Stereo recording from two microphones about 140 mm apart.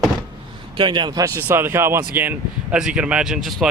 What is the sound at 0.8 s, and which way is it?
Speech, 35° right (ahead or behind).